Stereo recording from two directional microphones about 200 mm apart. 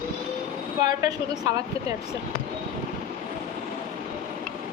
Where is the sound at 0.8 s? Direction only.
20° right (ahead or behind).